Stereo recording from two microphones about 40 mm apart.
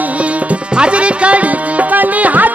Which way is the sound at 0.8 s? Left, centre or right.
Right.